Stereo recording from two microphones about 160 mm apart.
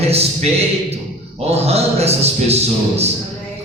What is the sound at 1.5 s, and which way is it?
A man's voice, 40° right (ahead or behind).